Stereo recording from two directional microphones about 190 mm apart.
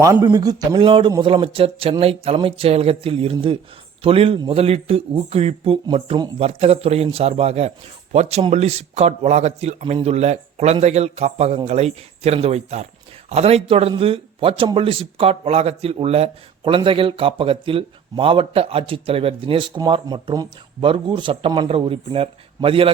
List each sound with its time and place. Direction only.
0.0 s a man's voice: 20° right (ahead or behind)